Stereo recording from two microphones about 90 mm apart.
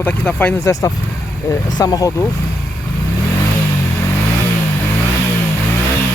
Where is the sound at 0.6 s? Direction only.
35° left (ahead or behind).